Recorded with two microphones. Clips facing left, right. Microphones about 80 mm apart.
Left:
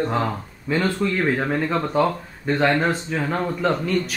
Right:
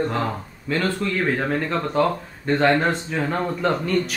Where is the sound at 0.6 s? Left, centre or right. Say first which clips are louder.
Left 2 dB; centre.